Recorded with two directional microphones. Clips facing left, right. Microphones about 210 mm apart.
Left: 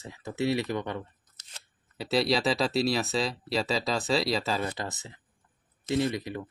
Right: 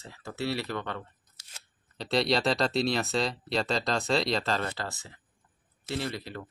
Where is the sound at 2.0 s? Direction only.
5° left (ahead or behind).